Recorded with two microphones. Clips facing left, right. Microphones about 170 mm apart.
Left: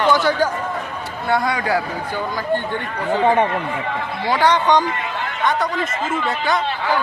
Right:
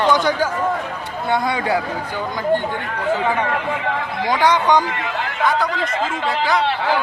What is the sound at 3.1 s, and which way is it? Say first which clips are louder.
Speech: left 4 dB; 25° left (ahead or behind).